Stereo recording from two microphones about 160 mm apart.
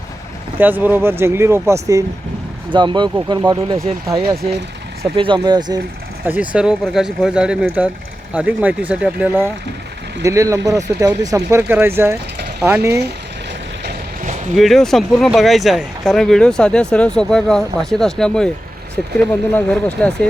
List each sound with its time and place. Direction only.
0.6 s speech: 10° right (ahead or behind); by 3.9 s 30° right (ahead or behind)
5.1 s speech: 30° right (ahead or behind)
6.2 s speech: 10° right (ahead or behind)
14.5 s speech: centre (ahead or behind)